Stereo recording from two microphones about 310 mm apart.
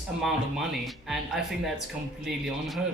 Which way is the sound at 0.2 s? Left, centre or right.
Centre.